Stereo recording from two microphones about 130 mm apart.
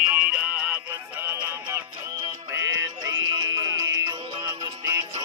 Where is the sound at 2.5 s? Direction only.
25° right (ahead or behind).